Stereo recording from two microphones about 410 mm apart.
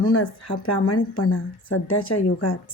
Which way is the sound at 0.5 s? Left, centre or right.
Left.